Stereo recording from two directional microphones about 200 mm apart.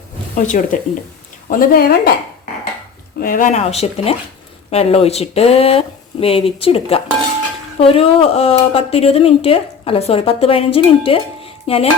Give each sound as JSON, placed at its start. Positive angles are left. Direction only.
{"t": 0.3, "sound": "speech", "side_deg": 40}
{"t": 3.2, "sound": "speech", "side_deg": 45}